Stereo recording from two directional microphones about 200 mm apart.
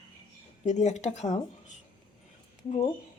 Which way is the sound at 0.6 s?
35° left (ahead or behind).